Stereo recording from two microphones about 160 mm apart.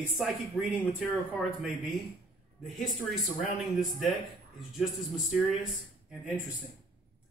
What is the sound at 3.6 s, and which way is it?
A man's voice, centre (ahead or behind).